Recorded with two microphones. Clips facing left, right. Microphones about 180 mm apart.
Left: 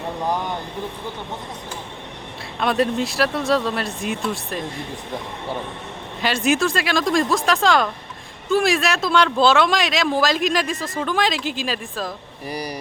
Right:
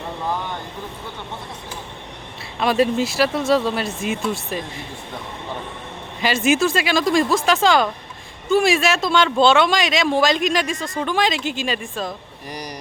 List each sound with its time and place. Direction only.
2.6 s speech: centre (ahead or behind)
6.2 s speech: centre (ahead or behind)